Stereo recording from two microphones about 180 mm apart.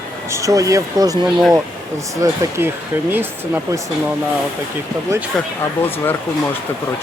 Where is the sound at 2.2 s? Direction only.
15° right (ahead or behind).